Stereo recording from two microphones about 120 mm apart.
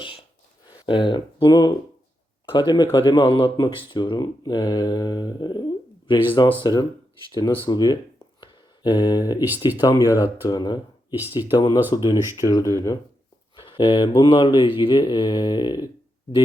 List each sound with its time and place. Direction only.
0.0 s a sound: 50° left (ahead or behind)
0.7 s speech: 40° left (ahead or behind)
6.6 s speech: 30° left (ahead or behind)
8.4 s a sound: 35° left (ahead or behind)
9.8 s speech: 30° left (ahead or behind)
11.1 s speech: 15° right (ahead or behind)
11.5 s speech: 30° left (ahead or behind)
13.6 s a sound: 45° left (ahead or behind)
14.2 s speech: 45° left (ahead or behind)